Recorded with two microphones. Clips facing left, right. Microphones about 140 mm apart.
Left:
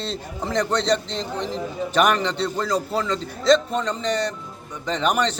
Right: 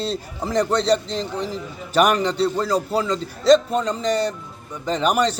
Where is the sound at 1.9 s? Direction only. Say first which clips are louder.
Right 3 dB; 10° right (ahead or behind).